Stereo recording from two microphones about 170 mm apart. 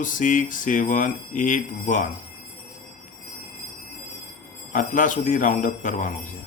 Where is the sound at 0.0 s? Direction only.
50° left (ahead or behind).